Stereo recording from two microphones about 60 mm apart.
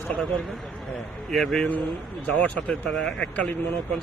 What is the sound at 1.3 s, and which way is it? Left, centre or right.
Speech, centre.